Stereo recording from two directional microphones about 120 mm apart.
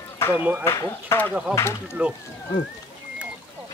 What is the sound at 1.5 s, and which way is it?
Speech, 5° right (ahead or behind).